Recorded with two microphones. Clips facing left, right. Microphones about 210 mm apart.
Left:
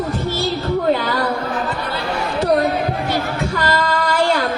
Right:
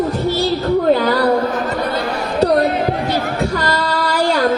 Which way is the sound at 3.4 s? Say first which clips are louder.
Right 1 dB; 40° right (ahead or behind).